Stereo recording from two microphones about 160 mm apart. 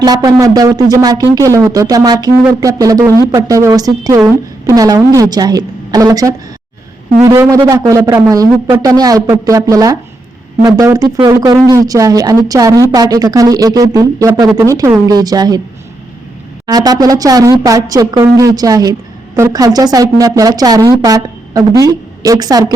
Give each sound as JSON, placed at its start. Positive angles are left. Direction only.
{"t": 0.0, "sound": "speech", "side_deg": -25}
{"t": 16.6, "sound": "speech", "side_deg": -25}